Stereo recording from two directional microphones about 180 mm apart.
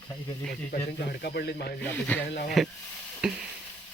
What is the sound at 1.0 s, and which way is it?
Speech, 60° left (ahead or behind).